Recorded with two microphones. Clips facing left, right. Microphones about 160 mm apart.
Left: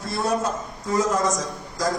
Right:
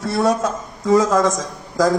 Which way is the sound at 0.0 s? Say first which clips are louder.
Right 6 dB; 80° right.